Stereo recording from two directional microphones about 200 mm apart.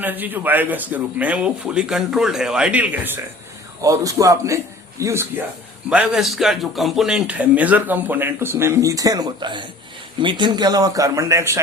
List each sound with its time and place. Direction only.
0.0 s a man's voice: 10° right (ahead or behind)